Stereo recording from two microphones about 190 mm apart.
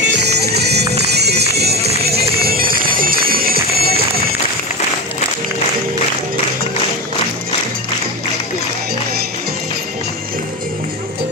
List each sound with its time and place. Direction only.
0.0 s music: 60° right (ahead or behind)